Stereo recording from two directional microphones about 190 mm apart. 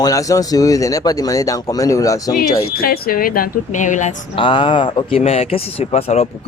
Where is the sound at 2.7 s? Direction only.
55° left (ahead or behind).